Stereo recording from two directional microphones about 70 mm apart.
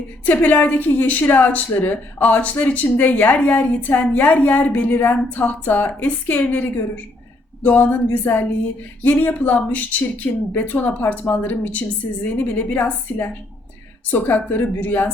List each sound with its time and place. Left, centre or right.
0.3 s a woman's voice: left